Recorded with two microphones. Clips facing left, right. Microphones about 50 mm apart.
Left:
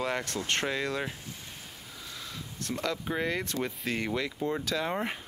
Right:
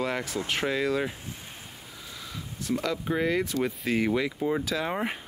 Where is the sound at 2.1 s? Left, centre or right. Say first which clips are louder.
Right 3 dB; centre.